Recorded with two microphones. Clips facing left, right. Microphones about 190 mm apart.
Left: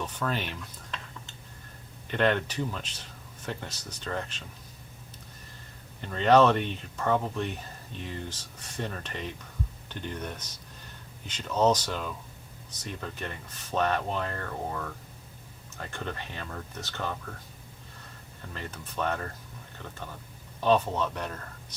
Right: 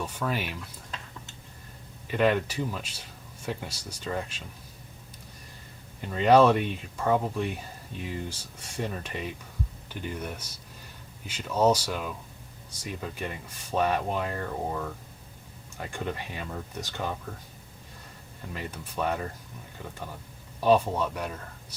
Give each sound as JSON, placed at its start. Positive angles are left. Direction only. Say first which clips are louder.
{"t": 0.0, "sound": "speech", "louder": "right 1 dB", "side_deg": -10}
{"t": 2.0, "sound": "speech", "louder": "right 2 dB", "side_deg": -5}
{"t": 6.0, "sound": "speech", "louder": "right 1 dB", "side_deg": -10}
{"t": 18.5, "sound": "speech", "louder": "right 2 dB", "side_deg": -10}
{"t": 20.6, "sound": "speech", "louder": "right 2 dB", "side_deg": -10}